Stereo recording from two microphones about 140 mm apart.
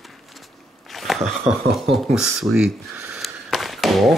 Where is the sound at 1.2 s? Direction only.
55° right (ahead or behind).